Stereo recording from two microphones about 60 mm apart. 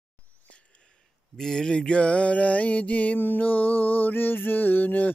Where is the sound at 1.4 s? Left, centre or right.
Centre.